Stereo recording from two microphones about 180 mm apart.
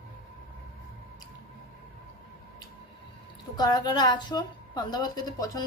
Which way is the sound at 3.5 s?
20° left (ahead or behind).